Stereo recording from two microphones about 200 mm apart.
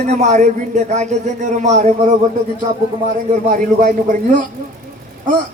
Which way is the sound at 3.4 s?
40° right (ahead or behind).